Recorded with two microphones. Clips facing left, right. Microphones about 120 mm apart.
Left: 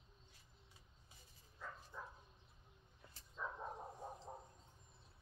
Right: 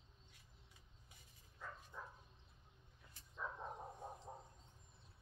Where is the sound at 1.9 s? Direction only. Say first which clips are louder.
Left 1 dB; 10° right (ahead or behind).